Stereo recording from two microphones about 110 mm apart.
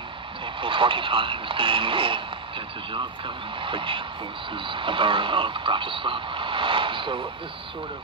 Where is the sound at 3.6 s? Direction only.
50° right (ahead or behind).